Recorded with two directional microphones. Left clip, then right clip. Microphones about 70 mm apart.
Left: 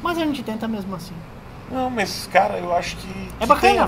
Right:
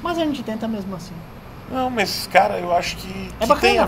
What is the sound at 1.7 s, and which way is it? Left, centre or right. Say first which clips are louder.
Speech: right 2 dB; right.